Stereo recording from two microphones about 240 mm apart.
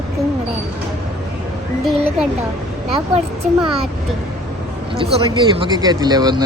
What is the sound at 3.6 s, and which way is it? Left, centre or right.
Speech, right.